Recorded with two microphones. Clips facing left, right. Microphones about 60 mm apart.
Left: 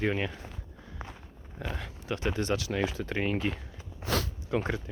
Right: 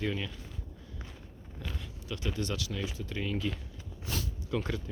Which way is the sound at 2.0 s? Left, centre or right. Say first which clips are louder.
Left 6 dB; left.